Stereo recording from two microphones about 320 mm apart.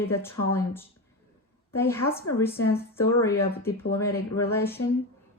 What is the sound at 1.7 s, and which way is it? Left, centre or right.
Speech, centre.